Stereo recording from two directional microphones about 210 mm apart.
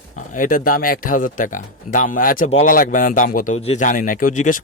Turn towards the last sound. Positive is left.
turn(degrees=40)  # may be behind; listen again after turning